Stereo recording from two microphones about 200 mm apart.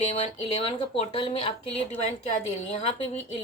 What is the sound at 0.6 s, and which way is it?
Speech, 30° left (ahead or behind).